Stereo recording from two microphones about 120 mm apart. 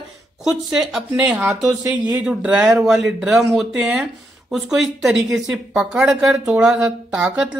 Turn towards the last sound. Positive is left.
turn(degrees=-10)  # may be behind; listen again after turning